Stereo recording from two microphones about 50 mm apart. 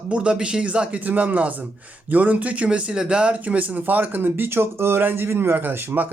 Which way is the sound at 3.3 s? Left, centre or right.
Right.